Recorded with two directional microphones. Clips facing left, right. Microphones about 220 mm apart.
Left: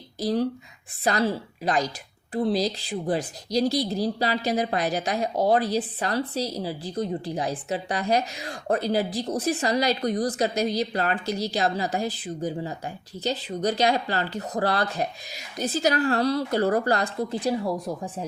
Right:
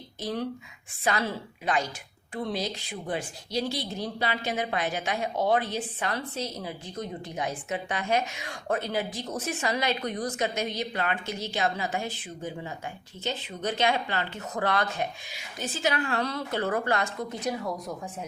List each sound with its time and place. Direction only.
0.2 s speech: 35° left (ahead or behind)